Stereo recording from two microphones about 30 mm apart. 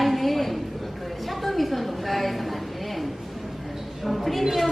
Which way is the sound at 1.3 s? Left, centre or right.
Centre.